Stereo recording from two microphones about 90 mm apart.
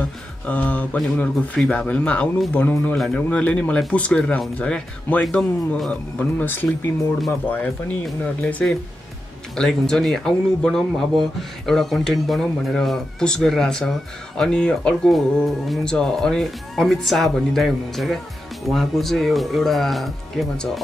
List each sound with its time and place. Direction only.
0.5 s speech: 15° left (ahead or behind)